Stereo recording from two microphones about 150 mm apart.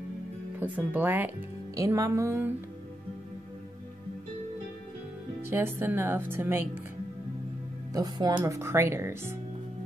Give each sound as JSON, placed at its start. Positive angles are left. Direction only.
{"t": 0.6, "sound": "speech", "side_deg": -10}
{"t": 1.8, "sound": "music", "side_deg": -20}
{"t": 5.4, "sound": "speech", "side_deg": -15}
{"t": 7.9, "sound": "music", "side_deg": -25}
{"t": 8.4, "sound": "speech", "side_deg": -20}